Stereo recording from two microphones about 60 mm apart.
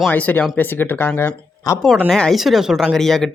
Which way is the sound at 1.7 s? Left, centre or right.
Left.